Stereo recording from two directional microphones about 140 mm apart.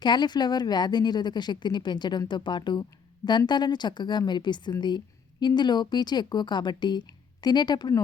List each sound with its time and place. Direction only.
0.0 s a woman's voice: 30° left (ahead or behind)